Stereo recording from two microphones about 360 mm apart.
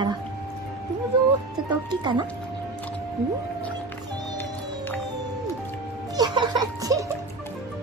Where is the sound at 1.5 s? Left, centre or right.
Centre.